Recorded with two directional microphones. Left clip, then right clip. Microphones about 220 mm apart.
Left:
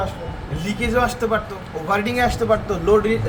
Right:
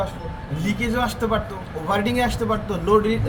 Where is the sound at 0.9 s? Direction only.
15° left (ahead or behind).